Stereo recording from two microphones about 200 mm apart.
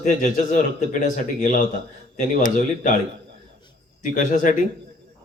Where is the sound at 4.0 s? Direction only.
40° left (ahead or behind).